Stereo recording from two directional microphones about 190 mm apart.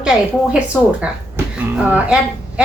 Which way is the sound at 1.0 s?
5° right (ahead or behind).